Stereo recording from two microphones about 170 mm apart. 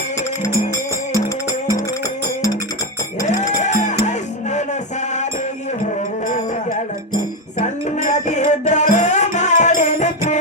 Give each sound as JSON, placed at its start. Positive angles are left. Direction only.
{"t": 3.6, "sound": "music", "side_deg": 45}
{"t": 5.8, "sound": "music", "side_deg": 45}
{"t": 7.9, "sound": "music", "side_deg": 45}